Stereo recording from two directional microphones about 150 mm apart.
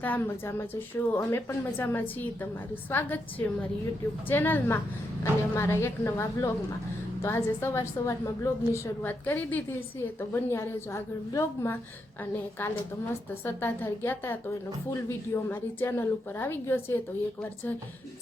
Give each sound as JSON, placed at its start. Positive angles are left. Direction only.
{"t": 0.0, "sound": "a woman's voice", "side_deg": 15}